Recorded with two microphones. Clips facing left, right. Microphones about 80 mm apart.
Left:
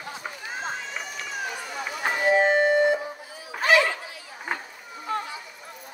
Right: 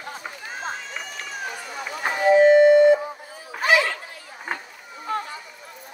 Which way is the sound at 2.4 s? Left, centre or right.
Left.